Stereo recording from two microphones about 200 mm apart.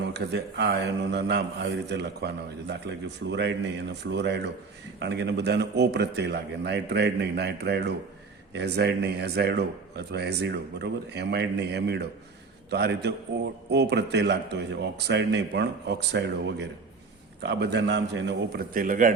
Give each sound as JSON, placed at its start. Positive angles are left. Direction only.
{"t": 0.1, "sound": "speech", "side_deg": -60}